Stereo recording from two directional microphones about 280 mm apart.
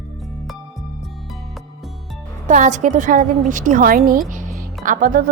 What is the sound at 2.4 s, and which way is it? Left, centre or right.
A woman's voice, right.